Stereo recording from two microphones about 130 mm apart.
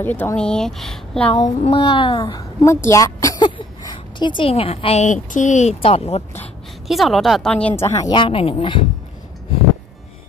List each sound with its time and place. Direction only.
0.0 s speech: 15° left (ahead or behind)
1.6 s a woman's voice: 45° left (ahead or behind)
2.6 s a woman's voice: 25° left (ahead or behind); by 5.0 s 50° left (ahead or behind)
5.0 s speech: 75° left (ahead or behind); by 6.2 s 50° left (ahead or behind)
6.9 s speech: centre (ahead or behind)
7.7 s speech: 20° left (ahead or behind)
8.1 s speech: 45° left (ahead or behind)